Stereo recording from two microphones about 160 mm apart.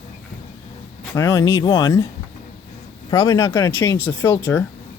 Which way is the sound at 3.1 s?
25° left (ahead or behind).